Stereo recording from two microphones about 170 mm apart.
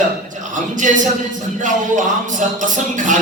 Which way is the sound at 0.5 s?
50° right (ahead or behind).